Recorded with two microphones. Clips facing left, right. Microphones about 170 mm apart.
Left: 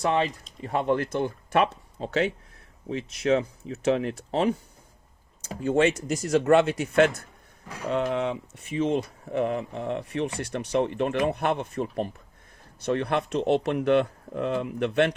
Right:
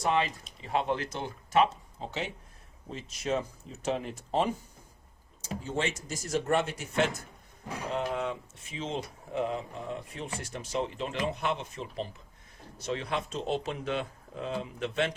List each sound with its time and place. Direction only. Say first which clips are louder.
0.0 s speech: left 4 dB; 55° left (ahead or behind); by 4.5 s 75° left (ahead or behind)
5.6 s speech: left 11 dB; 60° left (ahead or behind)